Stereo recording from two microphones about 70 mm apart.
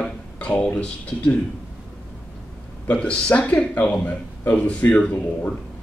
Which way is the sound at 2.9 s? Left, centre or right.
Centre.